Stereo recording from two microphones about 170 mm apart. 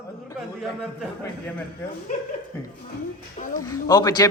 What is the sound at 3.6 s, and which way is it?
Speech, 20° left (ahead or behind).